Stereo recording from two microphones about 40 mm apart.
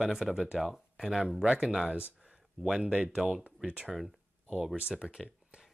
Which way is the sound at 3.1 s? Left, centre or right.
Centre.